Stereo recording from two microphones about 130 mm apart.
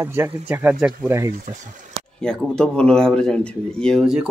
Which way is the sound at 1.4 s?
70° right (ahead or behind).